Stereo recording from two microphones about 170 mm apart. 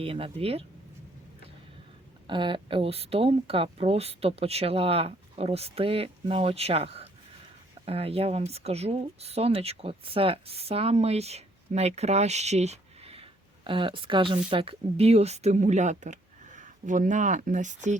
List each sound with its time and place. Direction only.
0.0 s speech: 35° right (ahead or behind)
2.2 s speech: 30° right (ahead or behind); by 17.7 s 45° right (ahead or behind)